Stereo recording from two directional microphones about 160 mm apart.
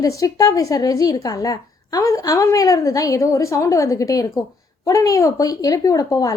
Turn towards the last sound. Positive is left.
turn(degrees=20)  # may be behind; listen again after turning